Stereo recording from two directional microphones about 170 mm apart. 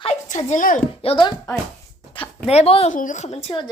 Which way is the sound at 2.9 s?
50° left (ahead or behind).